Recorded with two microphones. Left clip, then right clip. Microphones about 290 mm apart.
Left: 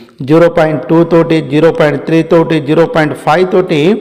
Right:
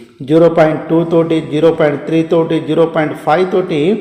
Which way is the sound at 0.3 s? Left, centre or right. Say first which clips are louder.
Left 1 dB; left.